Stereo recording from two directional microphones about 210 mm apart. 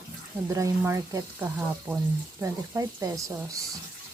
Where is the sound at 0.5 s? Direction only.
15° right (ahead or behind).